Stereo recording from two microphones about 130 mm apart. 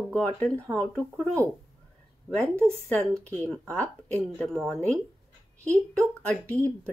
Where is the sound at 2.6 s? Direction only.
10° left (ahead or behind).